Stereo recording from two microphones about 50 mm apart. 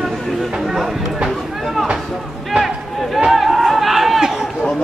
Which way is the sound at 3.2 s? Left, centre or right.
Centre.